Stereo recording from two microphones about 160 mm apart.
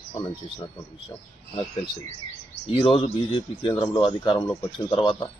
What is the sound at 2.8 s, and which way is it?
A man's voice, 35° left (ahead or behind).